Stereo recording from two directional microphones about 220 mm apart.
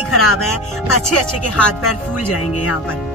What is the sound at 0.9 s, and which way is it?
Speech, 90° left.